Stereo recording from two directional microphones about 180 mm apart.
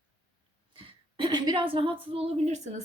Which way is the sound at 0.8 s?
25° right (ahead or behind).